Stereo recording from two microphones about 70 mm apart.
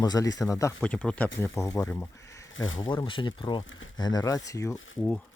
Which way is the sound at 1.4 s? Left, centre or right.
Left.